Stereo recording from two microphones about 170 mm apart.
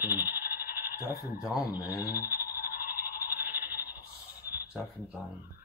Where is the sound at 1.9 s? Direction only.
20° left (ahead or behind).